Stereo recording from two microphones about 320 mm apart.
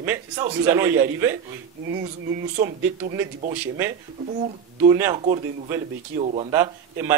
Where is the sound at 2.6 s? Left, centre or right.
Centre.